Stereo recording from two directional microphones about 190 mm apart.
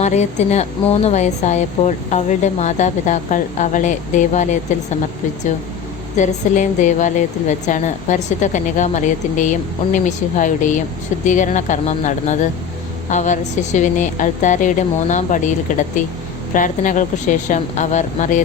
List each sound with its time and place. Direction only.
0.0 s a woman's voice: 35° left (ahead or behind)
6.1 s a woman's voice: 40° left (ahead or behind)
16.6 s a woman's voice: 45° left (ahead or behind)